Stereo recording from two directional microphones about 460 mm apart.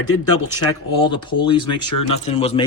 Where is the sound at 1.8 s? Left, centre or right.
Left.